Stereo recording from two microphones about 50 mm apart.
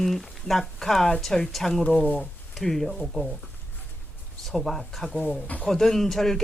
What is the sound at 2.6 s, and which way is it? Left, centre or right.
Speech, centre.